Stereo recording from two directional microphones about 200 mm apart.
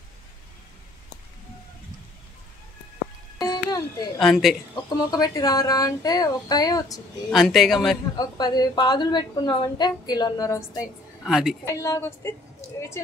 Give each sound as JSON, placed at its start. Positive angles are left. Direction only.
{"t": 3.3, "sound": "music", "side_deg": 20}
{"t": 4.2, "sound": "speech", "side_deg": 0}
{"t": 4.8, "sound": "a woman's voice", "side_deg": 20}
{"t": 7.2, "sound": "speech", "side_deg": 0}
{"t": 8.2, "sound": "a woman's voice", "side_deg": 20}
{"t": 11.2, "sound": "speech", "side_deg": 0}
{"t": 11.6, "sound": "a woman's voice", "side_deg": 15}